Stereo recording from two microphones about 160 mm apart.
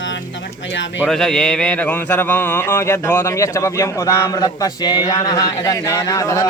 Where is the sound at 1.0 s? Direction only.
5° left (ahead or behind).